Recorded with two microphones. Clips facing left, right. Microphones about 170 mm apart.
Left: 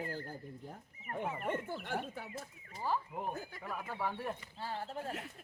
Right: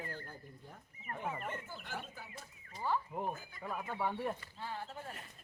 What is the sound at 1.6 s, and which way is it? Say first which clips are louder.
Speech: left 7 dB; 60° left (ahead or behind).